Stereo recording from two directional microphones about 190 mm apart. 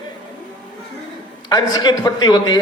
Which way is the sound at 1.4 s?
20° left (ahead or behind).